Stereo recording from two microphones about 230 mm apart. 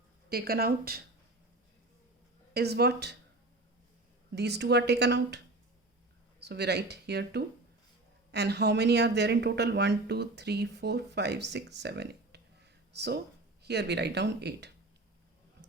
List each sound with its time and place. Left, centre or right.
0.3 s speech: right
2.5 s speech: right
4.4 s speech: right
6.4 s speech: right